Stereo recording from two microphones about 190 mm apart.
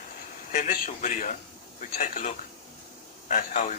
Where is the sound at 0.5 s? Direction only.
40° left (ahead or behind).